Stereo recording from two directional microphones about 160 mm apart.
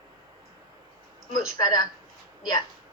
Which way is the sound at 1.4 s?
25° left (ahead or behind).